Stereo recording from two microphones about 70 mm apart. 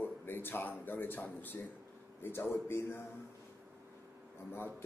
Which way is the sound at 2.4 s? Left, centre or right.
Left.